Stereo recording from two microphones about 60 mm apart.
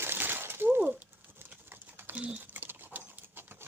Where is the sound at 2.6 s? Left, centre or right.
Right.